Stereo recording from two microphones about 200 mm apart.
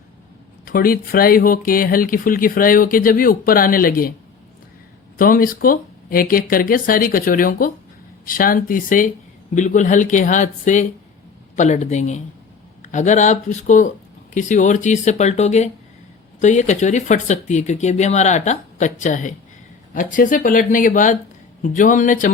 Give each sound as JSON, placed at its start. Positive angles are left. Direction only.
{"t": 0.6, "sound": "speech", "side_deg": 45}
{"t": 5.1, "sound": "speech", "side_deg": 45}